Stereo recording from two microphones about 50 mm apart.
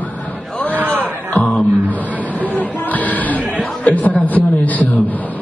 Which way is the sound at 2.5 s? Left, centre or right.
Left.